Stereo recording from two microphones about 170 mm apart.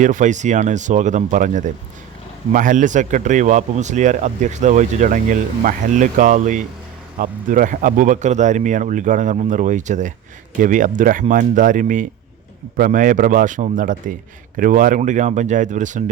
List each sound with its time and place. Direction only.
0.0 s speech: 50° right (ahead or behind)